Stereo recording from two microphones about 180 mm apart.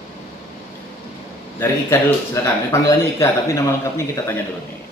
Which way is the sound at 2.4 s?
15° left (ahead or behind).